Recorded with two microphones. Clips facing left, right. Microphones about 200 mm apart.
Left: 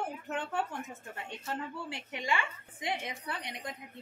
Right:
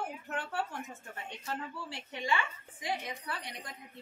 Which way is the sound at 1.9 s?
20° left (ahead or behind).